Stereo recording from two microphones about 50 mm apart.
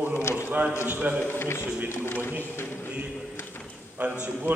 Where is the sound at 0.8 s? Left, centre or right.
Right.